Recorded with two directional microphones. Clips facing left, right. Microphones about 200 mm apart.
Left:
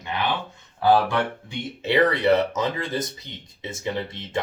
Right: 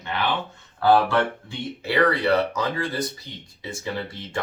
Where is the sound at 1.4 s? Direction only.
20° left (ahead or behind).